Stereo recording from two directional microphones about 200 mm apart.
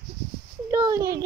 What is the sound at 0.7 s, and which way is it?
Speech, 15° right (ahead or behind).